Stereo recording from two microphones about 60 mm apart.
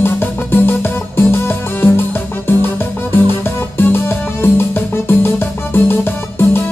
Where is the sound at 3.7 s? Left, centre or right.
Left.